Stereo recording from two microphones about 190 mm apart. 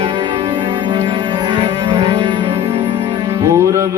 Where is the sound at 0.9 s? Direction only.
20° right (ahead or behind).